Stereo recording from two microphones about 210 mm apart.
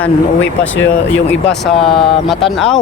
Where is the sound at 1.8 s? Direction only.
25° left (ahead or behind).